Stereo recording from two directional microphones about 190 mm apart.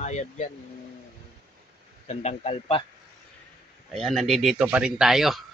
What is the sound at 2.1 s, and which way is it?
Speech, 35° left (ahead or behind).